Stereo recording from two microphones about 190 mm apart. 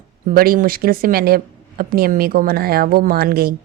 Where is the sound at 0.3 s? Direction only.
50° right (ahead or behind).